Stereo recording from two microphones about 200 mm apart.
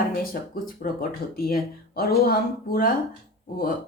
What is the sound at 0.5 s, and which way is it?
Speech, 45° left (ahead or behind).